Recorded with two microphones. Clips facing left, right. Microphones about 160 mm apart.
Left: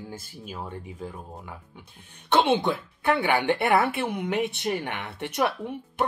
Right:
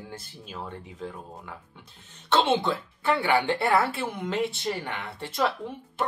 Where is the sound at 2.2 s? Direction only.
15° left (ahead or behind).